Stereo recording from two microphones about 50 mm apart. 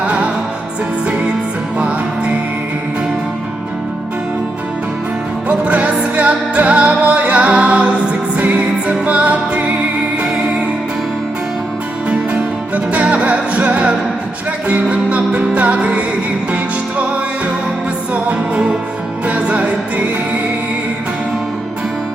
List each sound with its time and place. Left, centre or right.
0.0 s music: right
1.8 s music: right
5.5 s music: right
12.0 s music: right
18.1 s music: right